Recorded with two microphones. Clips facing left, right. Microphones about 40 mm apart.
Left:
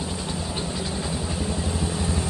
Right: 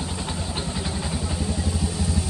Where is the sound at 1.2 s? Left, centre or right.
Centre.